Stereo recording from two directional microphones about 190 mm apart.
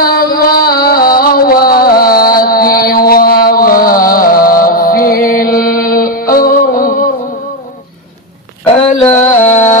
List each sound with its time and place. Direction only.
0.0 s music: 50° left (ahead or behind)
9.0 s music: 40° left (ahead or behind)